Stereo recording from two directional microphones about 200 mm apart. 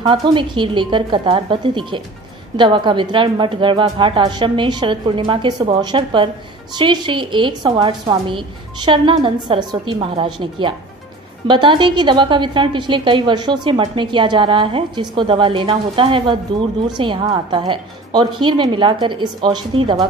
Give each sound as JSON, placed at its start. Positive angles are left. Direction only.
{"t": 0.0, "sound": "a woman's voice", "side_deg": -25}